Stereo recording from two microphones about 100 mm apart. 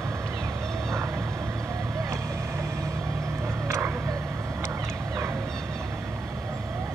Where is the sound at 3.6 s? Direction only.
20° right (ahead or behind).